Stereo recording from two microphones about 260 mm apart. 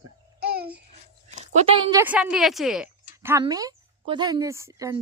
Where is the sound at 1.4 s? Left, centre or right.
Right.